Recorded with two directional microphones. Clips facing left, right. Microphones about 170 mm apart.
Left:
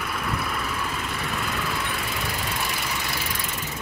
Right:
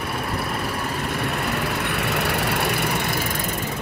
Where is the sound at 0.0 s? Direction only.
40° right (ahead or behind).